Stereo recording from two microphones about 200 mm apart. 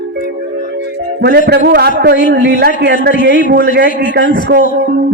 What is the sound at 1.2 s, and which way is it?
A man's voice, 55° right (ahead or behind).